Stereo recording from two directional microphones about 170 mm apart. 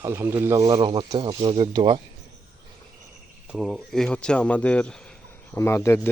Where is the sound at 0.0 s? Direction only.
15° right (ahead or behind).